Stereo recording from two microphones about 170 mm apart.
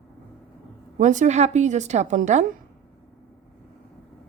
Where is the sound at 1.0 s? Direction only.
45° right (ahead or behind).